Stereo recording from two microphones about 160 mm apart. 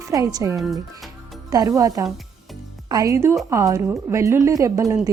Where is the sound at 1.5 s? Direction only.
20° right (ahead or behind).